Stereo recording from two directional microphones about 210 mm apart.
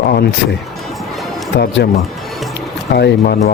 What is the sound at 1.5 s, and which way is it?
Speech, 50° left (ahead or behind).